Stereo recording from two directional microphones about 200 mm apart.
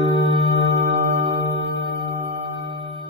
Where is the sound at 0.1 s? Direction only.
30° right (ahead or behind).